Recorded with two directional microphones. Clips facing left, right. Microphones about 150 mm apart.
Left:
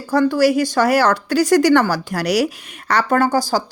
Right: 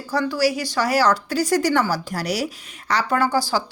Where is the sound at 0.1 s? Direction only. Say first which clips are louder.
Left 6 dB; 50° left (ahead or behind).